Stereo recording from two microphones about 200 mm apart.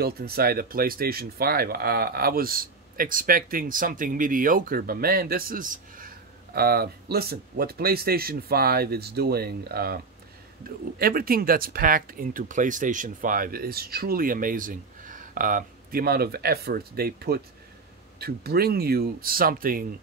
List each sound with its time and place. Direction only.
0.0 s speech: 50° right (ahead or behind)